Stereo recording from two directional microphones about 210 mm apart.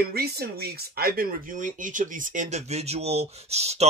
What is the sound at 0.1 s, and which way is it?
Speech, 50° right (ahead or behind).